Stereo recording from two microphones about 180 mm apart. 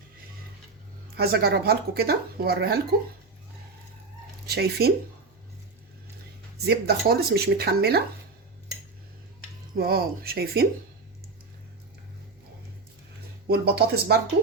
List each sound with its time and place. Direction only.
1.1 s speech: 60° right (ahead or behind)
4.4 s speech: 60° right (ahead or behind)
6.7 s speech: 60° right (ahead or behind)
9.7 s speech: 60° right (ahead or behind)
13.5 s speech: 65° right (ahead or behind)